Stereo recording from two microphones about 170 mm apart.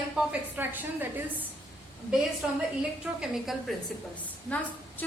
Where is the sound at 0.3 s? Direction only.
10° right (ahead or behind).